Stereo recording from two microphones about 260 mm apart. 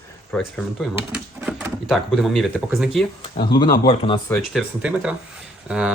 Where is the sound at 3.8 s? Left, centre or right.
Centre.